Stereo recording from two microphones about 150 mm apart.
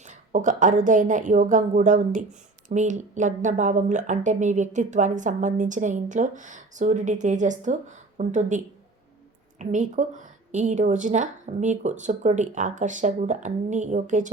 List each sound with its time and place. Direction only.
0.0 s speech: 55° right (ahead or behind)